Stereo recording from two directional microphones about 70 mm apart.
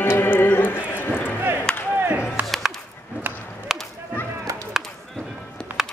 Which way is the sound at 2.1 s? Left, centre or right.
Right.